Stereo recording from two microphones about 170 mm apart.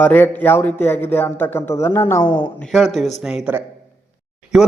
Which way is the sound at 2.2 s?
25° left (ahead or behind).